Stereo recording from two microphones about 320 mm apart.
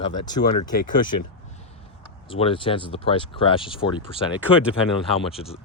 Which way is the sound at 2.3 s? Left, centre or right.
Centre.